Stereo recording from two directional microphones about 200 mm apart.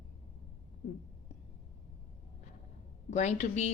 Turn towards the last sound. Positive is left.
turn(degrees=35)  # may be behind; listen again after turning